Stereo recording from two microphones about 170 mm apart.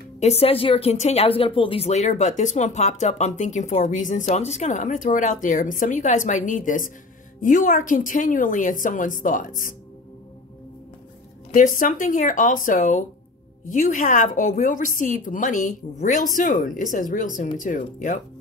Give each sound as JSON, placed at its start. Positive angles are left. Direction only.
{"t": 0.2, "sound": "speech", "side_deg": 35}
{"t": 11.5, "sound": "speech", "side_deg": 50}